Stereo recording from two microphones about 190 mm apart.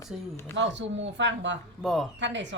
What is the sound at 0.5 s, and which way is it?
Speech, 70° right (ahead or behind).